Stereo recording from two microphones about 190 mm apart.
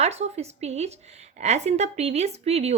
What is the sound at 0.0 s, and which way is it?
Speech, 35° right (ahead or behind).